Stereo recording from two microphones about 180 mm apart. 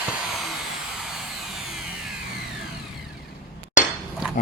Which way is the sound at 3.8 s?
45° left (ahead or behind).